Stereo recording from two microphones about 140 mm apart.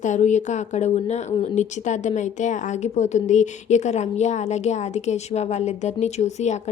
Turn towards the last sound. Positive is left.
turn(degrees=55)  # may be behind; listen again after turning